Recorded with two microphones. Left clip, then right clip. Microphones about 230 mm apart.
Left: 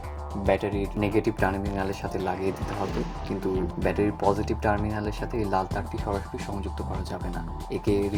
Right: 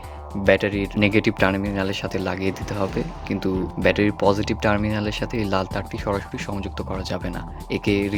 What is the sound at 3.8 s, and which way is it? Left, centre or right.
Speech, right.